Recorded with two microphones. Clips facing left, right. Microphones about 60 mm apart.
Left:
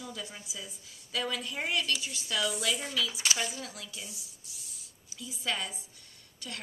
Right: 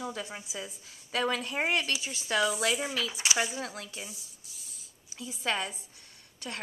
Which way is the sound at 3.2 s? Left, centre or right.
Right.